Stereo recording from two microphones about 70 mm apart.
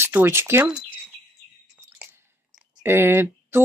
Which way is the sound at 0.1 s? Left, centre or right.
Right.